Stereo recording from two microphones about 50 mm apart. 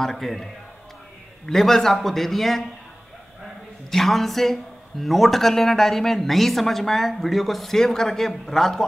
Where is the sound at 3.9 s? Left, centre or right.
Centre.